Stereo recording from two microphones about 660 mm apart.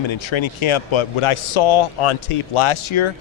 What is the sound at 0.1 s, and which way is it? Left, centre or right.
Speech, left.